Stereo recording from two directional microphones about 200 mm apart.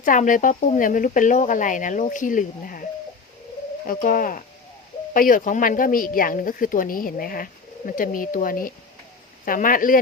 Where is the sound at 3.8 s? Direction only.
45° left (ahead or behind).